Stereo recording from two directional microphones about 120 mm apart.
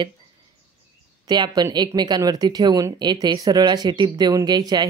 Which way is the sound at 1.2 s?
35° right (ahead or behind).